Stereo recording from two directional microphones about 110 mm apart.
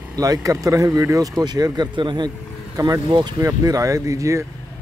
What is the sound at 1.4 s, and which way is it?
Speech, 40° right (ahead or behind).